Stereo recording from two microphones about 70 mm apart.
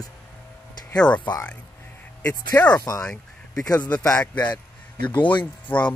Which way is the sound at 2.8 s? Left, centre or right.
Left.